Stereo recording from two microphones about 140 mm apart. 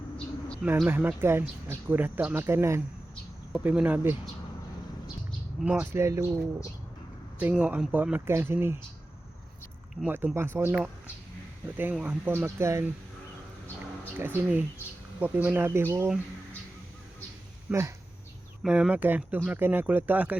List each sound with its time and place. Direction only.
0.9 s speech: 15° right (ahead or behind)
5.5 s speech: 5° right (ahead or behind); by 6.4 s 20° right (ahead or behind)
7.3 s speech: 10° right (ahead or behind)
10.0 s speech: 10° right (ahead or behind)
11.8 s speech: 15° right (ahead or behind)
14.2 s speech: 15° right (ahead or behind)
17.7 s speech: 20° right (ahead or behind)
18.6 s speech: 10° right (ahead or behind)